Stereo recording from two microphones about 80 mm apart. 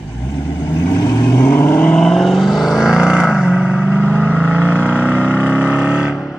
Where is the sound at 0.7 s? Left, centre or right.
Left.